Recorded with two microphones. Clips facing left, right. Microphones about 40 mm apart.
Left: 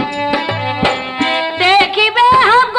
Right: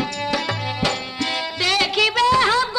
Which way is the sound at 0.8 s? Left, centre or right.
Left.